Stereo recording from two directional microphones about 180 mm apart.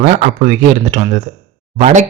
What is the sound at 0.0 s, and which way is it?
A man's voice, 45° right (ahead or behind).